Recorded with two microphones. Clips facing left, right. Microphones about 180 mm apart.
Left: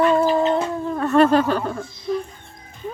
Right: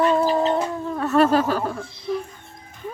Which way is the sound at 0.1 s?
Centre (ahead or behind).